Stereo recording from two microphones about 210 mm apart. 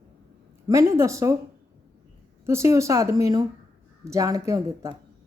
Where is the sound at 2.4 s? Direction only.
15° right (ahead or behind).